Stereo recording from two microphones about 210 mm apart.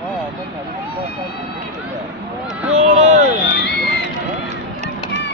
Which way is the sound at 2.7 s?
30° right (ahead or behind).